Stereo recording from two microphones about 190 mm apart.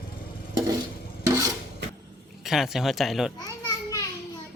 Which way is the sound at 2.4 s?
Centre (ahead or behind).